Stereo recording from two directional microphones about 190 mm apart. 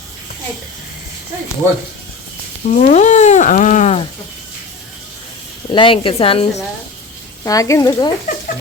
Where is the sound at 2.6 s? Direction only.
40° left (ahead or behind).